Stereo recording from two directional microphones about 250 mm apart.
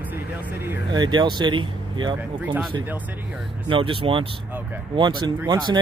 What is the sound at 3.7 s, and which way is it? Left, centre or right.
Speech, right.